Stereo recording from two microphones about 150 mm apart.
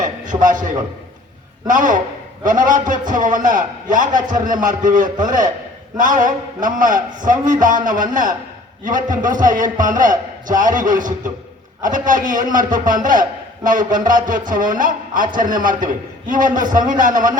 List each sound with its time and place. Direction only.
0.0 s a man's voice: 60° right (ahead or behind)